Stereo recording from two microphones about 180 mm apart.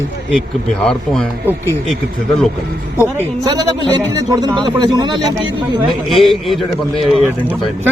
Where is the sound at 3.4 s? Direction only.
25° right (ahead or behind).